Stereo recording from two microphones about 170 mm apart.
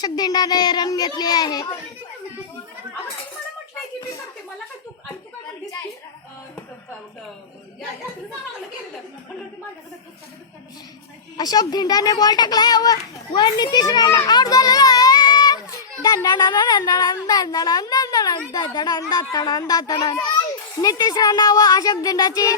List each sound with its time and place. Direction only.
0.0 s a child's voice: 25° left (ahead or behind)
11.3 s a child's voice: 25° left (ahead or behind)